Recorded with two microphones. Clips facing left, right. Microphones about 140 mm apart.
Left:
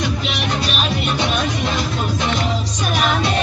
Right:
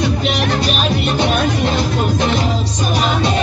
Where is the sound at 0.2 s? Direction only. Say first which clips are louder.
Right 5 dB; 50° right (ahead or behind).